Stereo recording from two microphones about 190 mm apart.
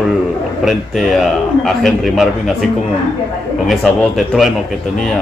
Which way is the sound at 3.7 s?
Centre (ahead or behind).